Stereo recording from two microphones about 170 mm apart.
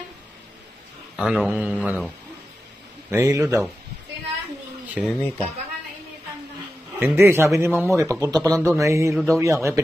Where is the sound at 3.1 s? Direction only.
15° right (ahead or behind).